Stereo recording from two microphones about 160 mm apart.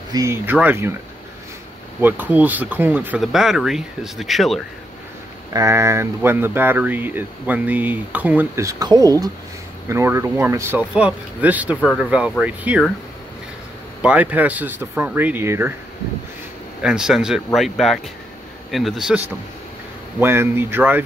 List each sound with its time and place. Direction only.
0.1 s speech: 20° right (ahead or behind)
2.0 s speech: 10° right (ahead or behind)
5.5 s speech: 20° right (ahead or behind)
14.0 s speech: 10° right (ahead or behind)
16.8 s speech: 5° right (ahead or behind)
20.2 s speech: 15° right (ahead or behind)